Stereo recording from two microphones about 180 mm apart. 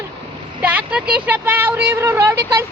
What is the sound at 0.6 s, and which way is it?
Vehicle, 10° right (ahead or behind).